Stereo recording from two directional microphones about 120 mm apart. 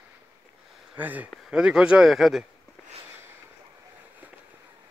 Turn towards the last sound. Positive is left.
turn(degrees=-20)  # may be behind; listen again after turning